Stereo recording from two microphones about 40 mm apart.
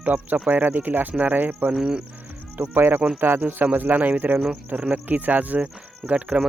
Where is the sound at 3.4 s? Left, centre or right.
Right.